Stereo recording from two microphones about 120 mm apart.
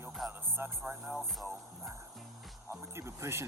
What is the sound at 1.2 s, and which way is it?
Speech, centre (ahead or behind).